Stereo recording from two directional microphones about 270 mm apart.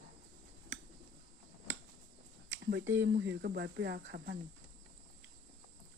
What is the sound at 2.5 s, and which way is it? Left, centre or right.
Speech, right.